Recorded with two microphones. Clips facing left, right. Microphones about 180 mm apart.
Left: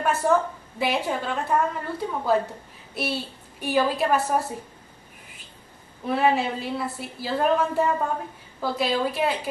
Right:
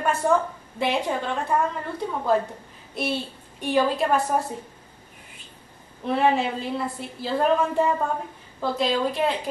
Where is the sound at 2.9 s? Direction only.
5° left (ahead or behind).